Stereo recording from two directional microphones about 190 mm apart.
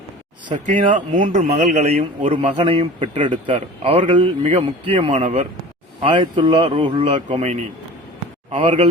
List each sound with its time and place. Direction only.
0.6 s a man's voice: 45° right (ahead or behind)